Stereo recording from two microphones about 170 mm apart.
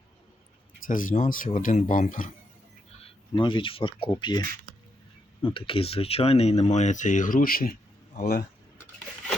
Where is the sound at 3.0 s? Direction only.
30° left (ahead or behind); by 7.7 s 55° left (ahead or behind).